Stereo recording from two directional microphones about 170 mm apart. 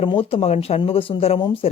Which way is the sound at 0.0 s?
30° left (ahead or behind).